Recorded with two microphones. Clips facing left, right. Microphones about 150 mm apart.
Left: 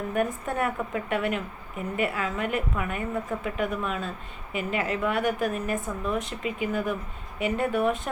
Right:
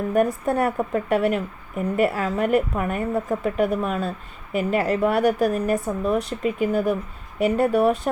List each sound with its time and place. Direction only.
0.1 s speech: 35° right (ahead or behind)